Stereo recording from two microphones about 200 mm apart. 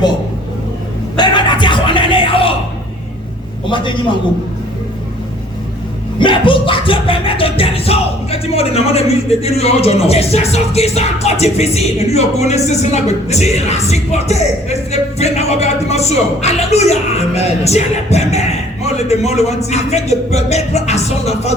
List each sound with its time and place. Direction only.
1.1 s a sound: 20° left (ahead or behind)
3.7 s a man's voice: 25° left (ahead or behind)
6.1 s music: 25° left (ahead or behind)